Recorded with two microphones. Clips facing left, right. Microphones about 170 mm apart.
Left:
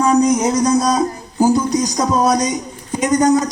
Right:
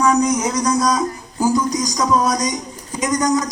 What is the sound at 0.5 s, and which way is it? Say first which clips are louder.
Speech: left 3 dB; 25° left (ahead or behind).